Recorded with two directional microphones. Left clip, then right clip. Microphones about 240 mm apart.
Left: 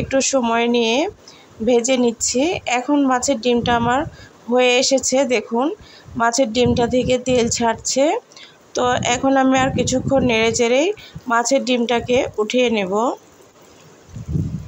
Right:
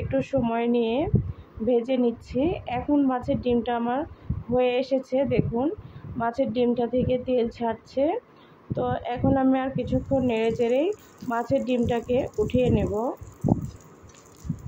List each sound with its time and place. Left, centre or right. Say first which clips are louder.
0.1 s speech: left 8 dB; centre